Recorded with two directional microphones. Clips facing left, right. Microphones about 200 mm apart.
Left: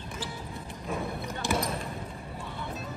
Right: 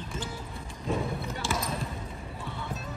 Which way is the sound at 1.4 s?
15° left (ahead or behind).